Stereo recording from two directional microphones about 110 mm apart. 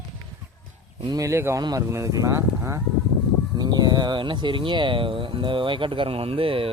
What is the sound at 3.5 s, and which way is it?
Speech, 40° right (ahead or behind).